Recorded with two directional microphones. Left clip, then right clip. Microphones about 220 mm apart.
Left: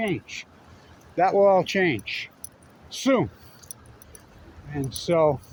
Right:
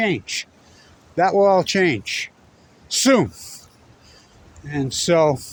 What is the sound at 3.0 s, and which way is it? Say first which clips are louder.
Speech: right 6 dB; 50° right (ahead or behind).